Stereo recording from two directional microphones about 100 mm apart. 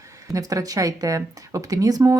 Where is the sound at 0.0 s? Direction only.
35° right (ahead or behind).